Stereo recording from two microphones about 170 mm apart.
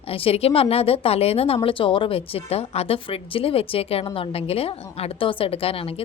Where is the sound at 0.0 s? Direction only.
35° left (ahead or behind).